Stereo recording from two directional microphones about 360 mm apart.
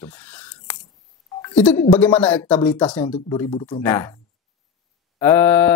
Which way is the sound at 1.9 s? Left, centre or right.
Centre.